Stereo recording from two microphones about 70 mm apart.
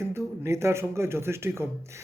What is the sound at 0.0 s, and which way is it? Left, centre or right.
A man's voice, right.